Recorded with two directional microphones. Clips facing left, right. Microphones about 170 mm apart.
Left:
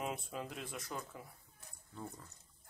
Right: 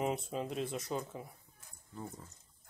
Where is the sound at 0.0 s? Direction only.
20° right (ahead or behind).